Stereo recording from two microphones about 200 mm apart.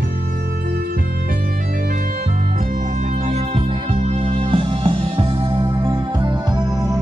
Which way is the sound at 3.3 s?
35° right (ahead or behind).